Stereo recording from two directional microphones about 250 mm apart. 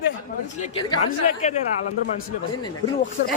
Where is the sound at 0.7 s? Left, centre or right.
Centre.